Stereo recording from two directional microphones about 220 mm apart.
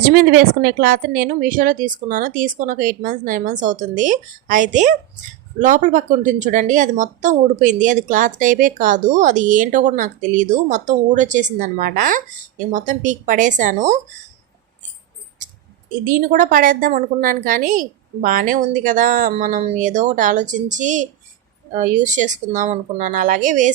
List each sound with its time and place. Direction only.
0.1 s a woman's voice: 40° right (ahead or behind)
16.0 s a woman's voice: 35° right (ahead or behind)